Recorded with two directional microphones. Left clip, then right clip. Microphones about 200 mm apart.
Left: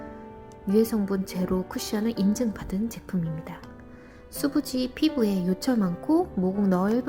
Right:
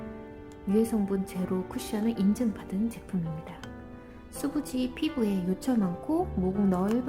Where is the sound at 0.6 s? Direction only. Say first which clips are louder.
Left 4 dB; 15° left (ahead or behind).